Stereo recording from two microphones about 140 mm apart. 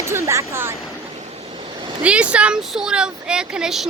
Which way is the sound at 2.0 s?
10° right (ahead or behind).